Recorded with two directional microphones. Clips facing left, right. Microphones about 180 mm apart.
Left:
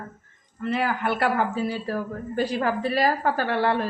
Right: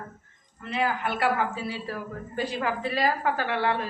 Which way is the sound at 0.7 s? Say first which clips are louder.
Left 2 dB; 50° left (ahead or behind).